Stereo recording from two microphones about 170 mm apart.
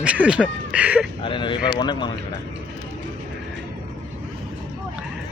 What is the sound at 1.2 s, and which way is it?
Speech, 30° left (ahead or behind).